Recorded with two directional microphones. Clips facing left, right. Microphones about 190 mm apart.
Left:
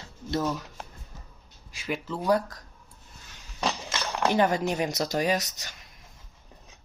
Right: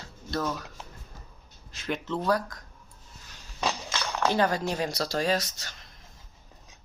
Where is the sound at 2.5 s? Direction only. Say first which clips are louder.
Right 1 dB; 35° left (ahead or behind).